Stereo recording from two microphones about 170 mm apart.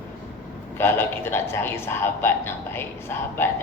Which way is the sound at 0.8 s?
15° left (ahead or behind).